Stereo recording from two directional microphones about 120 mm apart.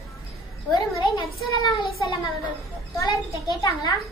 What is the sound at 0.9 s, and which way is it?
A child's voice, 40° left (ahead or behind).